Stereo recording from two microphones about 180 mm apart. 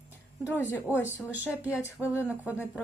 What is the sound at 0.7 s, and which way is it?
Speech, 10° left (ahead or behind).